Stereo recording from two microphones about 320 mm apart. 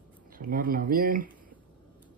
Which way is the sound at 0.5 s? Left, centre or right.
Right.